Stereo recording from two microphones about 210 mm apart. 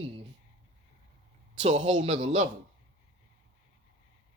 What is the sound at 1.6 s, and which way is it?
Speech, 35° right (ahead or behind).